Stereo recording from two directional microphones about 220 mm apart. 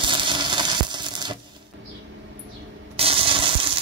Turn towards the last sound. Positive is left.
turn(degrees=-25)  # may be behind; listen again after turning